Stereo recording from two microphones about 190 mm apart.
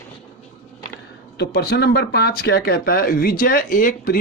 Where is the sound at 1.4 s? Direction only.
60° left (ahead or behind).